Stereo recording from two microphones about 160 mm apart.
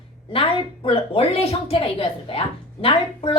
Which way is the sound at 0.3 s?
35° left (ahead or behind).